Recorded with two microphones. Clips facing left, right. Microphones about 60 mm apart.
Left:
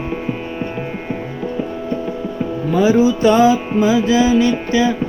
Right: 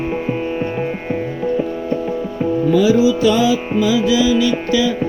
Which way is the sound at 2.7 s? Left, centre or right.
Left.